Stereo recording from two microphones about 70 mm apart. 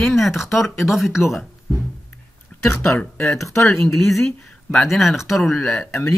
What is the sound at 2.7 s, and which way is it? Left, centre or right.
Speech, left.